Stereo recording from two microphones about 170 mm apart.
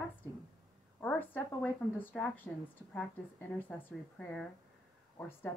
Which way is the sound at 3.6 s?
10° left (ahead or behind).